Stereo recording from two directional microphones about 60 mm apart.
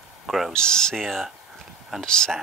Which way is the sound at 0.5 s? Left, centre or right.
Centre.